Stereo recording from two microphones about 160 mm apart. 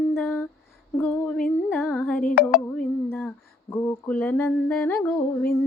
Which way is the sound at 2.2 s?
75° left (ahead or behind).